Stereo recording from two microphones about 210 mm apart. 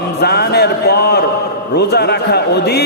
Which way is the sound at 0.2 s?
50° left (ahead or behind).